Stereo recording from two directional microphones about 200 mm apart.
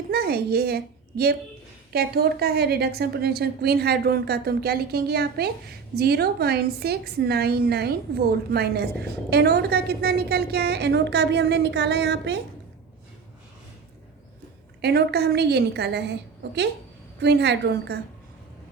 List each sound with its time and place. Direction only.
0.1 s a woman's voice: 50° right (ahead or behind)
14.8 s a woman's voice: 55° right (ahead or behind)